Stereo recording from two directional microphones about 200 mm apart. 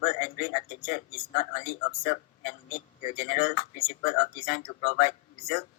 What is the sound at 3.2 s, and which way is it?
A man's voice, 40° left (ahead or behind).